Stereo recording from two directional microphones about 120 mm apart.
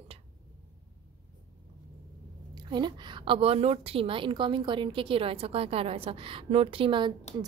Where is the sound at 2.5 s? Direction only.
40° right (ahead or behind).